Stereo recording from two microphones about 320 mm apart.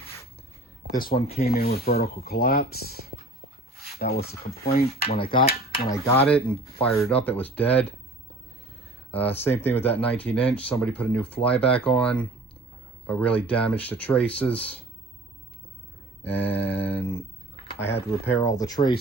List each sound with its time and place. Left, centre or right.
1.0 s speech: left
5.0 s speech: centre
9.1 s speech: centre
16.3 s speech: centre
17.7 s a sound: centre
18.3 s speech: centre